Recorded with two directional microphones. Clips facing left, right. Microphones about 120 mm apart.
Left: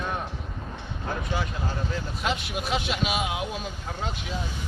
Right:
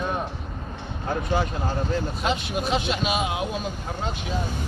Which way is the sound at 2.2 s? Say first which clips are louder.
Right 1 dB; centre (ahead or behind).